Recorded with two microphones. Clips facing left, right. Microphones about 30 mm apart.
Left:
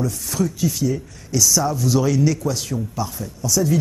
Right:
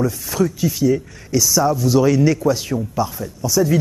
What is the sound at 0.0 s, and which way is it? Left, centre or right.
Speech, centre.